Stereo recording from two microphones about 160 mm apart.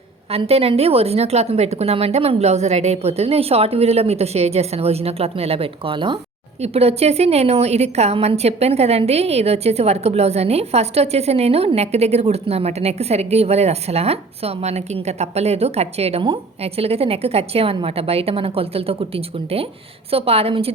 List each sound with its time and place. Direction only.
0.3 s a woman's voice: 40° right (ahead or behind)